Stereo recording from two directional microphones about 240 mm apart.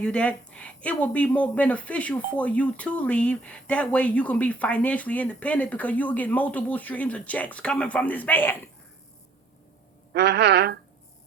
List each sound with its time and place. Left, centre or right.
0.0 s speech: centre
10.1 s a woman's voice: right